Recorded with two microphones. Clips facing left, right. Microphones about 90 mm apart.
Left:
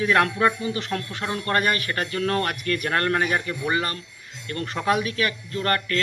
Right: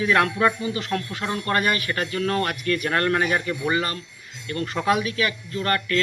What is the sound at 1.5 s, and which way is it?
Speech, 40° left (ahead or behind).